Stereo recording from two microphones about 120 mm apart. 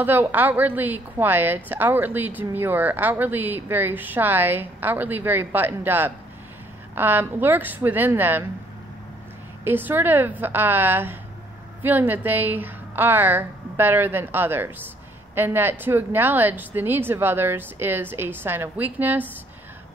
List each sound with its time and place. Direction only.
0.0 s a woman's voice: 15° right (ahead or behind)
9.7 s a woman's voice: 15° right (ahead or behind)